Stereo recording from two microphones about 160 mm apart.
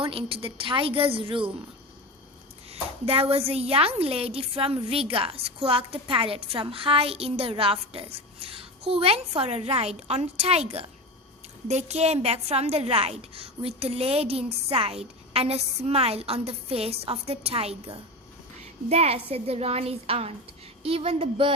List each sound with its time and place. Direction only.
0.0 s a woman's voice: 35° right (ahead or behind)
2.6 s a woman's voice: 35° right (ahead or behind)